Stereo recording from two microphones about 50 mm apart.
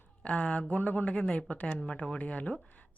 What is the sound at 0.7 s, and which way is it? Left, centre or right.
Speech, left.